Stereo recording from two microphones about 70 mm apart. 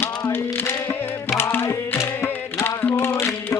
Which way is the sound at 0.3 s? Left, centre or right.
Left.